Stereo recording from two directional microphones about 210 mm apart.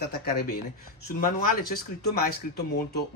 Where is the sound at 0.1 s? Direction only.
45° left (ahead or behind).